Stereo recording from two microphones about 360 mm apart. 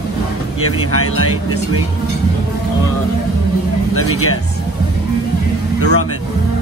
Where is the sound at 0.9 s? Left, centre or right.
Left.